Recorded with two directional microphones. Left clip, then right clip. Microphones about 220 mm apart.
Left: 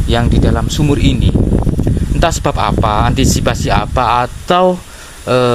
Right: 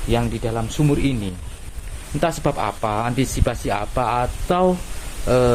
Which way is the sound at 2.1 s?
30° left (ahead or behind).